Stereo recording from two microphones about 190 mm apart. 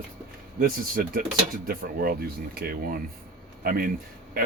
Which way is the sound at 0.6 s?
50° right (ahead or behind).